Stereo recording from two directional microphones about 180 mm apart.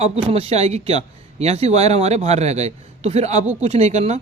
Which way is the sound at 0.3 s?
35° right (ahead or behind).